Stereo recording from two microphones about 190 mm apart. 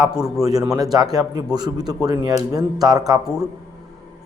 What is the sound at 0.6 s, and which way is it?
A man's voice, 15° right (ahead or behind).